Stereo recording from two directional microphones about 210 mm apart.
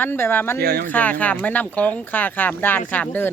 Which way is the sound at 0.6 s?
45° right (ahead or behind).